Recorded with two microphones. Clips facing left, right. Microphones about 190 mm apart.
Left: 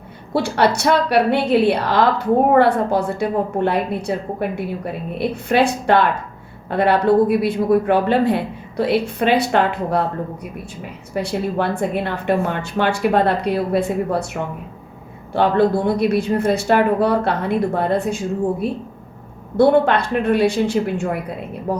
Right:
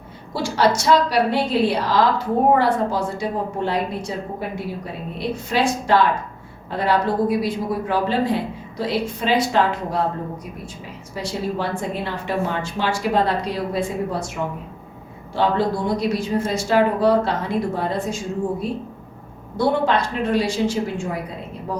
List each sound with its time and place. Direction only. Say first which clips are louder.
0.3 s a woman's voice: left 2 dB; 60° left (ahead or behind)
11.1 s a woman's voice: left 4 dB; 60° left (ahead or behind)
15.3 s a woman's voice: left 4 dB; 60° left (ahead or behind)
19.5 s a woman's voice: left 5 dB; 60° left (ahead or behind)